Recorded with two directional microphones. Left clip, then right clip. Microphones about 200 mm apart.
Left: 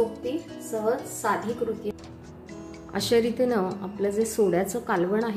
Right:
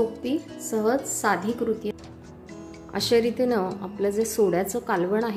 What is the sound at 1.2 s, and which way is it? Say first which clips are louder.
Speech: right 2 dB; 45° right (ahead or behind).